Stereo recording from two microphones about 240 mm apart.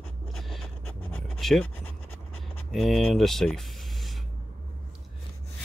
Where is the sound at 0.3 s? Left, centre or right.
Centre.